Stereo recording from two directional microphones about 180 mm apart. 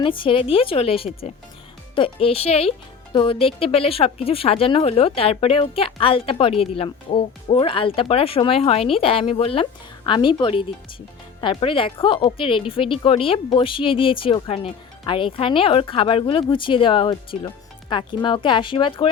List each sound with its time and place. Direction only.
0.0 s a woman's voice: 30° left (ahead or behind)